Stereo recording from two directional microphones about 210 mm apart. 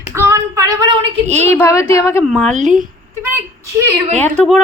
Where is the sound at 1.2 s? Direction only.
30° right (ahead or behind).